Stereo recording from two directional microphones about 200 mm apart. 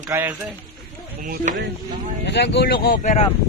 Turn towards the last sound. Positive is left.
turn(degrees=40)  # may be behind; listen again after turning